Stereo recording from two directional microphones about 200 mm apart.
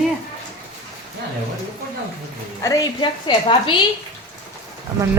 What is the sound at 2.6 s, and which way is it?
A woman's voice, 15° left (ahead or behind).